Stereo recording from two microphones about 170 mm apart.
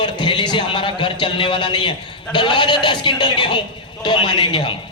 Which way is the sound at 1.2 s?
30° left (ahead or behind).